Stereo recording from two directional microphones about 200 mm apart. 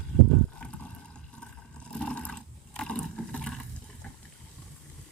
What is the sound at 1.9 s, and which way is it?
Roar, 5° left (ahead or behind).